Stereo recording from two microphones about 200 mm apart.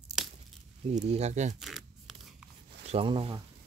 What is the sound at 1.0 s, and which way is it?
Speech, 35° right (ahead or behind).